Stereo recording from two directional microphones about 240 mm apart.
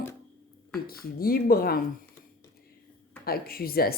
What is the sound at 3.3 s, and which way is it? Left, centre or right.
Speech, left.